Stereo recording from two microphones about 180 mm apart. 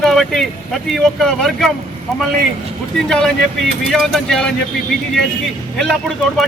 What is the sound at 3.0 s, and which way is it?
Speech, 5° left (ahead or behind).